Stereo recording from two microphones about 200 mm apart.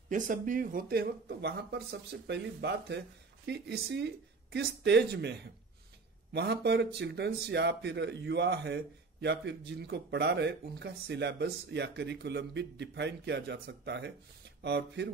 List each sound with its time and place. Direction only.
0.1 s speech: 40° right (ahead or behind); by 15.0 s 60° right (ahead or behind)